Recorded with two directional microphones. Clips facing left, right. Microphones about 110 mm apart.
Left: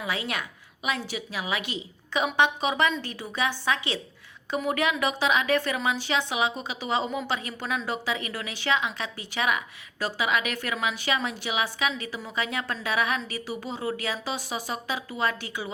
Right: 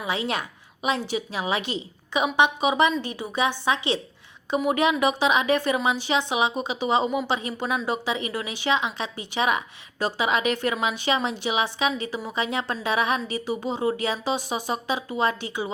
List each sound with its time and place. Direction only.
0.0 s speech: 25° right (ahead or behind)
2.1 s a woman's voice: 15° right (ahead or behind)